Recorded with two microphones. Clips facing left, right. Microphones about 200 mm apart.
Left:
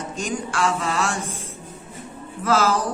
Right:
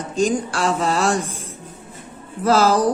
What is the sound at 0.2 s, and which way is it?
Speech, 35° right (ahead or behind).